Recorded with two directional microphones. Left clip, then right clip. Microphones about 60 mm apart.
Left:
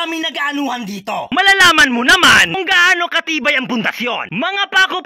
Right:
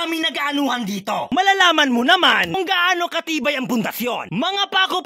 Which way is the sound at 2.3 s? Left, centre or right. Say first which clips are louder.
Left 7 dB; right.